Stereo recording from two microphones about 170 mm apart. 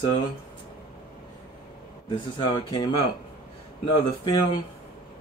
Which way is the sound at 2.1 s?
30° left (ahead or behind).